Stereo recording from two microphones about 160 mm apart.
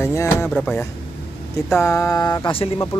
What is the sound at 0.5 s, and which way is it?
Speech, 5° left (ahead or behind).